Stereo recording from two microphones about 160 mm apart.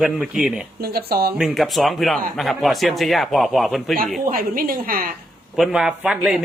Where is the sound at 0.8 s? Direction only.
75° right (ahead or behind).